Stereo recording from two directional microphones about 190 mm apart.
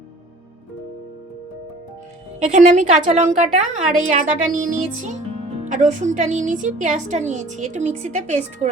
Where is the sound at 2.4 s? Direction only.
40° right (ahead or behind).